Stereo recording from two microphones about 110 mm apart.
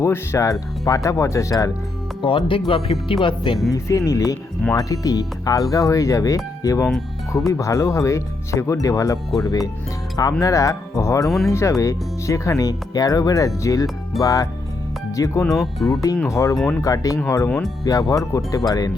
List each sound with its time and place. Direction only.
0.0 s speech: 25° left (ahead or behind)
2.2 s speech: 50° left (ahead or behind)
3.7 s speech: 30° left (ahead or behind)
11.3 s speech: centre (ahead or behind)
11.5 s speech: 25° left (ahead or behind)
15.4 s speech: centre (ahead or behind)
15.9 s speech: 30° left (ahead or behind)